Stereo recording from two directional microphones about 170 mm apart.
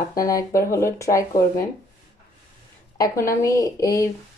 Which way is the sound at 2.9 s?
20° left (ahead or behind).